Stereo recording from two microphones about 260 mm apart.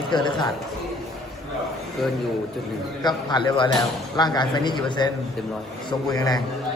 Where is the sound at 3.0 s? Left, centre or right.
Centre.